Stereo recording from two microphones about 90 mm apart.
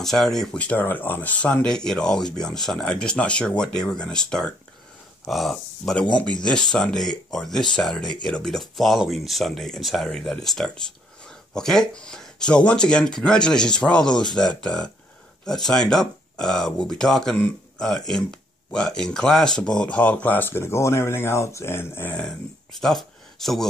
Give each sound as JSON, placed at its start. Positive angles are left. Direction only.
{"t": 0.0, "sound": "speech", "side_deg": 5}
{"t": 23.4, "sound": "speech", "side_deg": 0}